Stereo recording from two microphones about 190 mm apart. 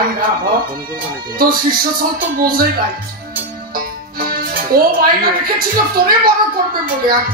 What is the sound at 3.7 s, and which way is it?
Music, 50° right (ahead or behind).